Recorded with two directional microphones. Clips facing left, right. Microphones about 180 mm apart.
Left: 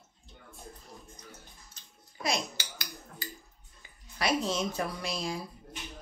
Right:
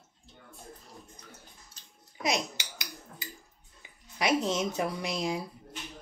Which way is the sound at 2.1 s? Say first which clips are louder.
Right 2 dB; 20° right (ahead or behind).